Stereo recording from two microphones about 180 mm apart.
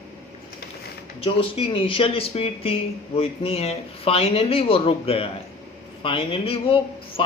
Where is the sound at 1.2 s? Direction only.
30° left (ahead or behind).